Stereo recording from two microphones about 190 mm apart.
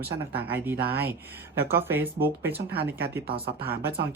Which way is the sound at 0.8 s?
55° right (ahead or behind).